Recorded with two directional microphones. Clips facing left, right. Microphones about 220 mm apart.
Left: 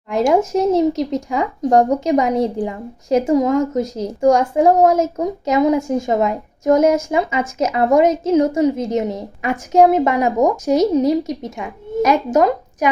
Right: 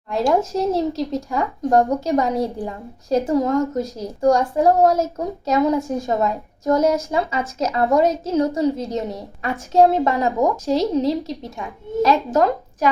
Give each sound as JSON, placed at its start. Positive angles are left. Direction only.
{"t": 0.1, "sound": "a woman's voice", "side_deg": 20}